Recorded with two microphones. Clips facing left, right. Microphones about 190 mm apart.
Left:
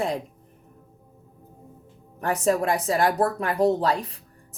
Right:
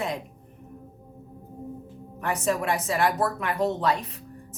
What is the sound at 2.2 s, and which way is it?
A woman's voice, 35° left (ahead or behind).